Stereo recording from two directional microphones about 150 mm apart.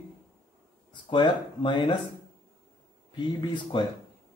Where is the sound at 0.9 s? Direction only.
35° left (ahead or behind).